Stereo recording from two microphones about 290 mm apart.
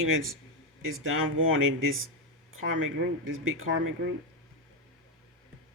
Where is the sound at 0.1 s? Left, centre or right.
Right.